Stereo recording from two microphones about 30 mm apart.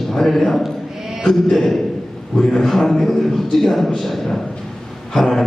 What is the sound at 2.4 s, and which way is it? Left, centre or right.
Speech, centre.